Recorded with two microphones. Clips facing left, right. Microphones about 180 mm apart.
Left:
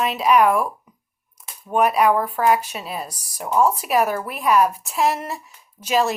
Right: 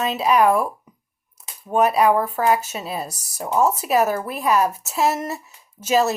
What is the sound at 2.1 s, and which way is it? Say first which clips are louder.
Speech: right 1 dB; 10° right (ahead or behind).